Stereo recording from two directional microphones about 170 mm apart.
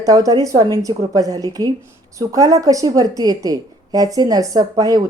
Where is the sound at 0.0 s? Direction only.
20° right (ahead or behind).